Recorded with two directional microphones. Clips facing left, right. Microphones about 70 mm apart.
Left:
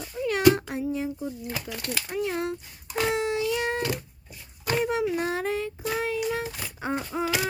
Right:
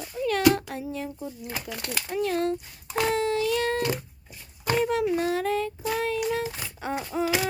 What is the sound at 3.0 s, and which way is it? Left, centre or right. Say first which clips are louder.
Child singing: right 1 dB; centre.